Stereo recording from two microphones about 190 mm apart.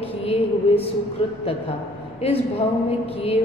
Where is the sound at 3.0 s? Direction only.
30° left (ahead or behind).